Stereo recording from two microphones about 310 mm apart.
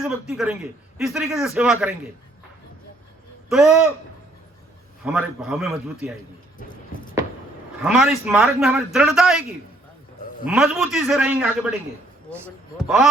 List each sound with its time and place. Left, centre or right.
0.0 s a man's voice: centre
3.5 s a man's voice: centre
5.0 s a man's voice: centre
6.6 s a sound: left
7.9 s a man's voice: centre
10.4 s a man's voice: centre